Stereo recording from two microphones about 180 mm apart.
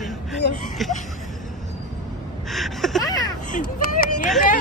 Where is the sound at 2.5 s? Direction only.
Centre (ahead or behind).